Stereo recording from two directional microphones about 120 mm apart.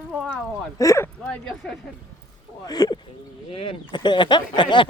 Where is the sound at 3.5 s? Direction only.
50° left (ahead or behind).